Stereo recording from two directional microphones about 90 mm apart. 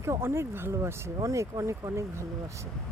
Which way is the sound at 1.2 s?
40° right (ahead or behind).